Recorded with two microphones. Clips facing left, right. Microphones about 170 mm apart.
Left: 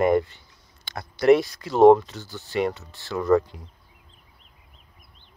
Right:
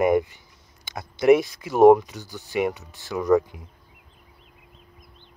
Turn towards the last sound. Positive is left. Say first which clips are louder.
# even
turn(degrees=-15)  # may be behind; listen again after turning